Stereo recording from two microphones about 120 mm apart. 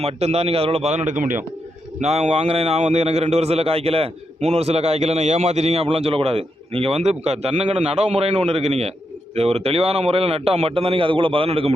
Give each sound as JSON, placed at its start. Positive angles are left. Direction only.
{"t": 0.0, "sound": "a man's voice", "side_deg": -60}
{"t": 2.0, "sound": "a man's voice", "side_deg": -70}
{"t": 4.4, "sound": "a man's voice", "side_deg": -65}